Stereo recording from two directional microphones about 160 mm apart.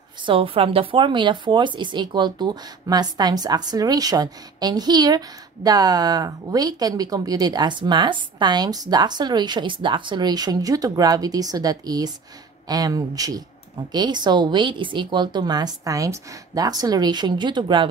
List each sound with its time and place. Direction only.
0.3 s a woman's voice: 35° right (ahead or behind)